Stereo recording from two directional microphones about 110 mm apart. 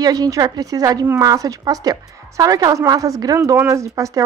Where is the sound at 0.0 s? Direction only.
35° right (ahead or behind).